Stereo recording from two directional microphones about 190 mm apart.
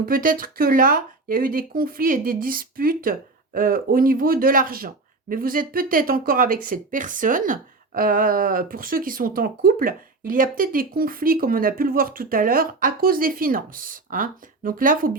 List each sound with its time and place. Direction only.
0.0 s speech: 50° right (ahead or behind)